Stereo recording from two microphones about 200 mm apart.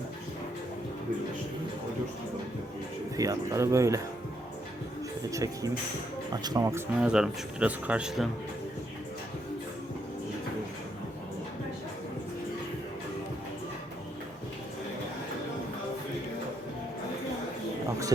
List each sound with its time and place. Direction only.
3.2 s speech: 15° right (ahead or behind)
5.3 s speech: 15° right (ahead or behind)